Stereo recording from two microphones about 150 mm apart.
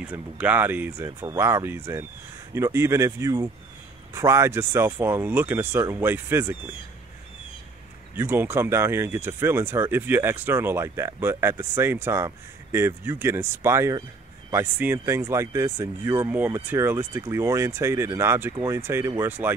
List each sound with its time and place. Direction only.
0.0 s speech: 10° right (ahead or behind)
8.2 s speech: 15° right (ahead or behind)